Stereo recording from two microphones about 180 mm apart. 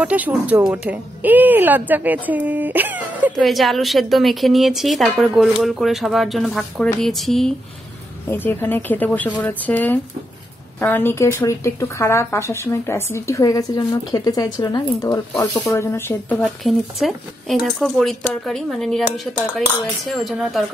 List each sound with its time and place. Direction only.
0.0 s speech: 10° right (ahead or behind); by 16.3 s 15° left (ahead or behind)
16.3 s speech: centre (ahead or behind)